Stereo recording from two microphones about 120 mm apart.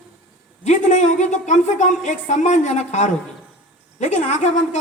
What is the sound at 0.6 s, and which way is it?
A woman's voice, 85° left.